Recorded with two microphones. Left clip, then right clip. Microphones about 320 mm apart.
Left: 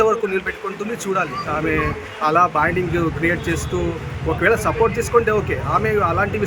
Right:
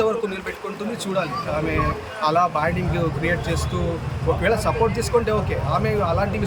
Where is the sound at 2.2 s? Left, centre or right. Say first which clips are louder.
Left 4 dB; centre.